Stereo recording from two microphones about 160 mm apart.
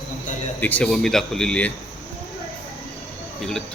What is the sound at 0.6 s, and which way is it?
Speech, 10° left (ahead or behind).